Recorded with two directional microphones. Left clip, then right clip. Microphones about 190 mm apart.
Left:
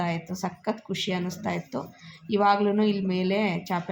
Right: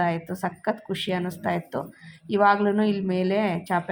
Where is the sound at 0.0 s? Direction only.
15° right (ahead or behind).